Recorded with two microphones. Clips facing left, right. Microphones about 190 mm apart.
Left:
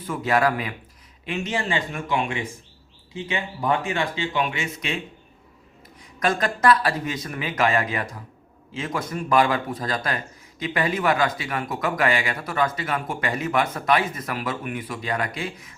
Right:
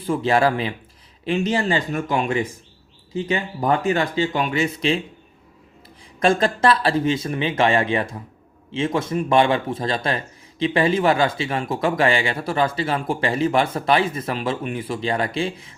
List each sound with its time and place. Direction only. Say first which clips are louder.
0.0 s speech: right 3 dB; 30° right (ahead or behind)
6.0 s speech: right 5 dB; 30° right (ahead or behind)